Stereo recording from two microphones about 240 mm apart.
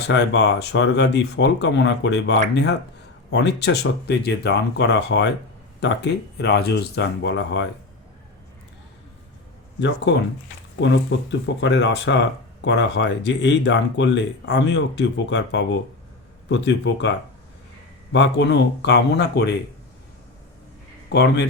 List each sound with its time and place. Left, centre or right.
0.1 s speech: left
9.8 s speech: left
21.1 s speech: left